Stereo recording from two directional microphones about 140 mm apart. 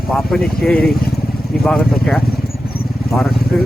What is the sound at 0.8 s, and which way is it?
Speech, 90° left.